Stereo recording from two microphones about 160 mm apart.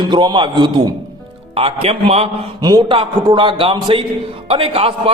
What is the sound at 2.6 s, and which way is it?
A man's voice, 25° right (ahead or behind).